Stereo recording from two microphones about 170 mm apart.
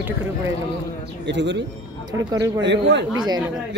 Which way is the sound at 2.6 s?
90° right.